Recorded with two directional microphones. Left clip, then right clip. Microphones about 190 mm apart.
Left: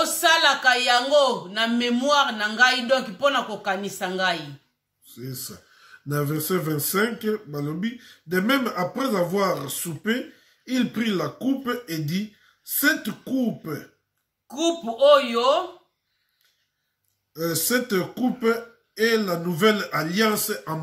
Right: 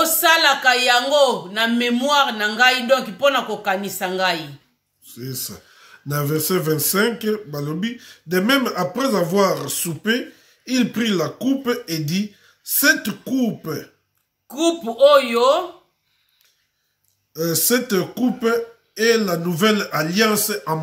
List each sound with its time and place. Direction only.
0.0 s a man's voice: 20° right (ahead or behind)
5.0 s speech: 45° right (ahead or behind)
14.5 s a man's voice: 25° right (ahead or behind)
17.3 s speech: 45° right (ahead or behind)